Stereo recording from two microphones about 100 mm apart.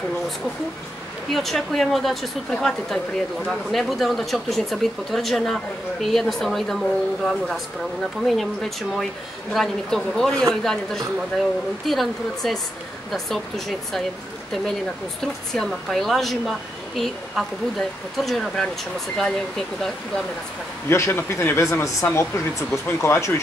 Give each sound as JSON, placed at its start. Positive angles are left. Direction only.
{"t": 1.3, "sound": "speech", "side_deg": 5}
{"t": 15.5, "sound": "speech", "side_deg": 5}
{"t": 20.9, "sound": "speech", "side_deg": 25}